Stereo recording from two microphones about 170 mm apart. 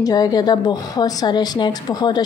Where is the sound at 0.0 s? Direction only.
20° left (ahead or behind).